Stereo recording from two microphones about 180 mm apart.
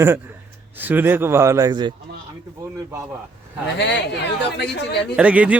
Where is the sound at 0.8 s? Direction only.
10° right (ahead or behind).